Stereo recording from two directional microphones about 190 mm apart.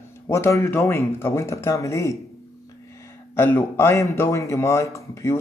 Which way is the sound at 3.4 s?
10° left (ahead or behind).